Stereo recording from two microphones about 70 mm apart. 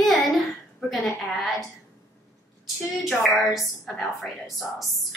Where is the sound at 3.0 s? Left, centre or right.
Centre.